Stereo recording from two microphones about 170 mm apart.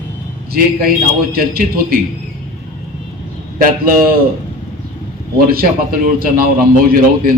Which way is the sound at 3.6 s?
55° right (ahead or behind).